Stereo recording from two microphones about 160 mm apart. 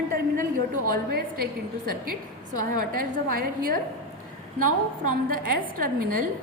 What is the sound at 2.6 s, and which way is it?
A woman's voice, 60° right (ahead or behind).